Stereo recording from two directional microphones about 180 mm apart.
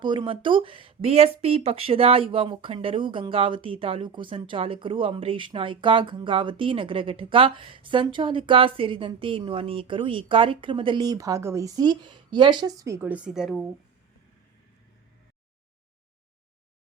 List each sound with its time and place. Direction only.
0.0 s speech: 25° right (ahead or behind); by 13.7 s 5° right (ahead or behind)